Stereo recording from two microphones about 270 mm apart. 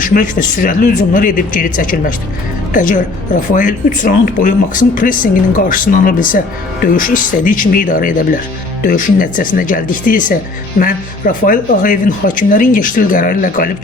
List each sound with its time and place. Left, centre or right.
0.0 s speech: left